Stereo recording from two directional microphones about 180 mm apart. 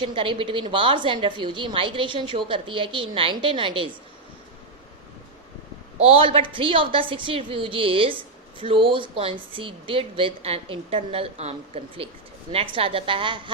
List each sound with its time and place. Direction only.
0.0 s a woman's voice: 30° right (ahead or behind)
6.0 s a woman's voice: 30° right (ahead or behind)